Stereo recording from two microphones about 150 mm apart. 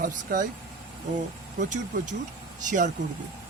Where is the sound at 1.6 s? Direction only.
60° right (ahead or behind).